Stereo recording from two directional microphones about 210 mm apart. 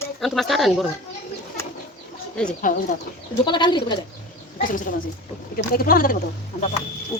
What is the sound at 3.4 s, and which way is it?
Speech, 20° left (ahead or behind).